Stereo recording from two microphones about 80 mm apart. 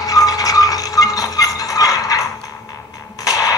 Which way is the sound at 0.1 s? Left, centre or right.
Left.